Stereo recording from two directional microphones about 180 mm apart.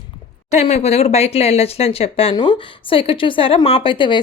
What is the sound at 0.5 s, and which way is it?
Speech, 40° left (ahead or behind).